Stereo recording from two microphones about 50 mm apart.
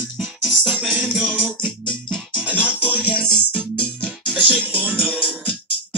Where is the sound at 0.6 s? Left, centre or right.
Right.